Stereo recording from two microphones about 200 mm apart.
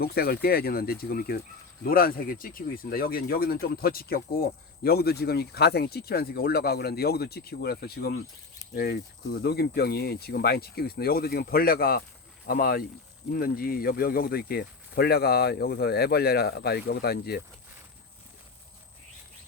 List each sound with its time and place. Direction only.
0.0 s speech: 50° left (ahead or behind)